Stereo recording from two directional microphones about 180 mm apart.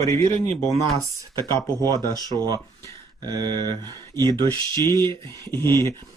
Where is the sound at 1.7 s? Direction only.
20° right (ahead or behind).